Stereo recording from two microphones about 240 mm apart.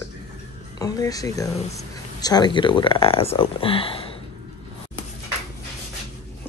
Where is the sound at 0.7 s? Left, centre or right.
Centre.